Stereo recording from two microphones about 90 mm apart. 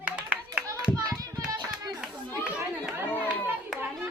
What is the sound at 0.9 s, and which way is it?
Hands, 45° right (ahead or behind).